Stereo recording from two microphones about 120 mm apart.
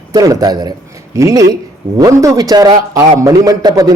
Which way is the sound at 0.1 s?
30° right (ahead or behind).